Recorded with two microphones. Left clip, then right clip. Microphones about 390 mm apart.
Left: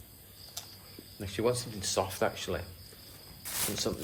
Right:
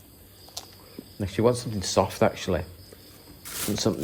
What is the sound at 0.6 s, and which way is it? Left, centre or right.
Cricket, right.